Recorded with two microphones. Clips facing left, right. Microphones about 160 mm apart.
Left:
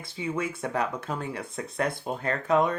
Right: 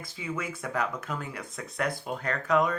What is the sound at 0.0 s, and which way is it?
Speech, 30° left (ahead or behind).